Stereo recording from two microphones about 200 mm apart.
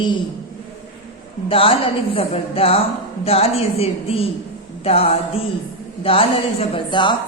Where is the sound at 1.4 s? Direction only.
25° left (ahead or behind).